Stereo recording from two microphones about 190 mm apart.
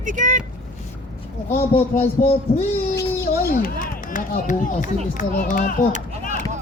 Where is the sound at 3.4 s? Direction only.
50° left (ahead or behind).